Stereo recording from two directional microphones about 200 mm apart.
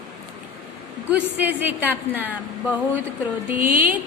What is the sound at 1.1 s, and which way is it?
A woman's voice, 10° right (ahead or behind).